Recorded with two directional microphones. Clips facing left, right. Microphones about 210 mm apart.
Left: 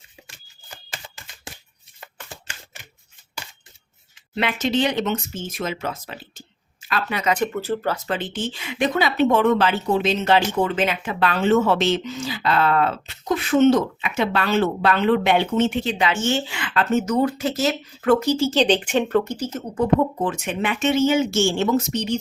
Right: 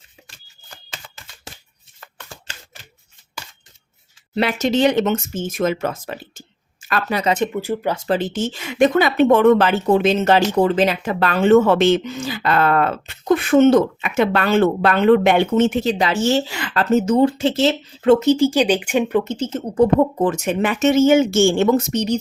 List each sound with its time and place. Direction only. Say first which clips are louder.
4.4 s speech: right 4 dB; 40° right (ahead or behind)
7.3 s speech: right 2 dB; 15° right (ahead or behind)
7.9 s speech: right 6 dB; 35° right (ahead or behind)
20.2 s speech: right 5 dB; 40° right (ahead or behind)